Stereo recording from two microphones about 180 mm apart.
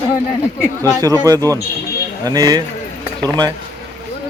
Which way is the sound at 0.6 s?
15° left (ahead or behind).